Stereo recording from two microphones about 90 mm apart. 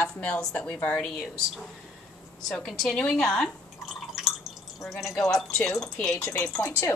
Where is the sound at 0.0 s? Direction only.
15° left (ahead or behind).